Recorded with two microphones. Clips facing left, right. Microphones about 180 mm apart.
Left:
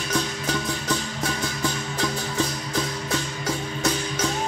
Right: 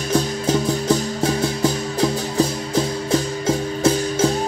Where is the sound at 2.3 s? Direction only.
35° right (ahead or behind).